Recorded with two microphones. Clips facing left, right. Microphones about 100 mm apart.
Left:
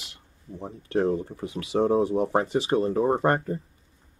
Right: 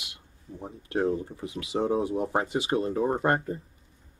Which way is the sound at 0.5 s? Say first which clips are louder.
Left 4 dB; 25° left (ahead or behind).